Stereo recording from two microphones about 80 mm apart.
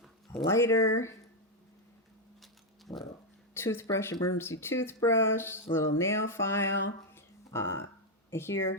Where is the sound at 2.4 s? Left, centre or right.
Centre.